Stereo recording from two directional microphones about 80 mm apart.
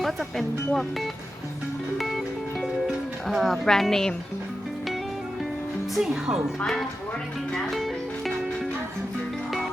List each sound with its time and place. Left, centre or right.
0.0 s speech: centre
2.0 s music: centre
5.9 s speech: centre
6.6 s speech: centre
7.5 s music: centre